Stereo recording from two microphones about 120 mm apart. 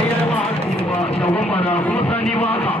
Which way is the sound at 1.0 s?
55° left (ahead or behind).